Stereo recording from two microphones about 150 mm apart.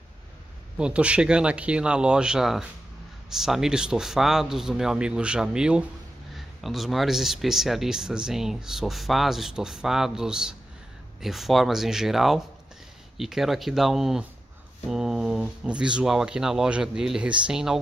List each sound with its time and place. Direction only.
0.7 s speech: 5° right (ahead or behind)